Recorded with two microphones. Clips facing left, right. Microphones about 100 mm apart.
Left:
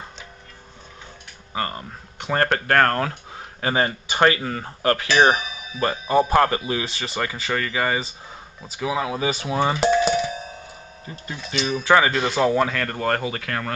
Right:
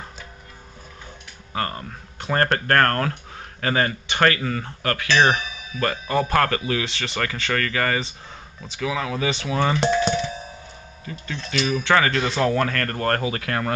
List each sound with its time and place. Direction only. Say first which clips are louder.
1.5 s speech: even; 5° left (ahead or behind)
9.8 s a sound: left 2 dB; 5° left (ahead or behind)
11.2 s speech: right 1 dB; 5° left (ahead or behind)
11.7 s speech: left 2 dB; 15° left (ahead or behind); by 13.7 s 5° right (ahead or behind)